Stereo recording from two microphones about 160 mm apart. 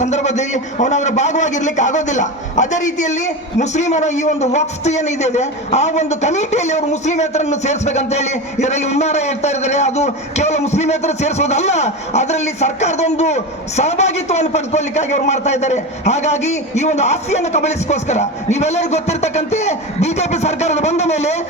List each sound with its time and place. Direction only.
0.0 s a man's voice: 45° left (ahead or behind)